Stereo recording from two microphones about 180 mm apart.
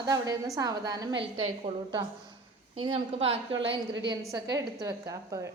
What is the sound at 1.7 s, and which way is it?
A woman's voice, 30° right (ahead or behind).